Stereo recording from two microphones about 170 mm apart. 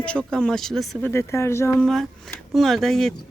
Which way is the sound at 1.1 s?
15° left (ahead or behind).